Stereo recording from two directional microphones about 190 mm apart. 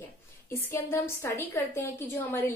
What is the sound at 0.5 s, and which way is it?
Speech, 15° left (ahead or behind).